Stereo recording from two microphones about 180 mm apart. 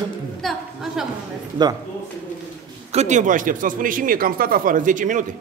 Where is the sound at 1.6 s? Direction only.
25° right (ahead or behind).